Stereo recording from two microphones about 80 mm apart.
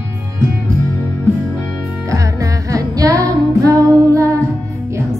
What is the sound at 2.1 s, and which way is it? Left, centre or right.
Music, right.